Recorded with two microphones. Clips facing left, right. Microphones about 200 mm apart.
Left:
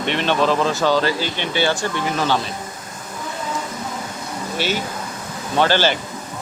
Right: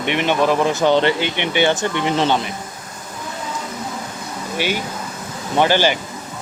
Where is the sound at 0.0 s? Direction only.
15° right (ahead or behind).